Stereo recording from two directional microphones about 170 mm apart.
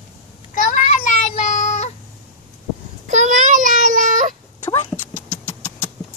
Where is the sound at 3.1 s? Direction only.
45° right (ahead or behind).